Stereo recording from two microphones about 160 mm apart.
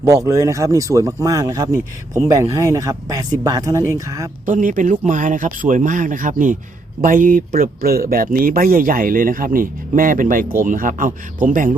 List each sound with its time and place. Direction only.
0.0 s speech: 20° right (ahead or behind)
4.4 s speech: 55° right (ahead or behind)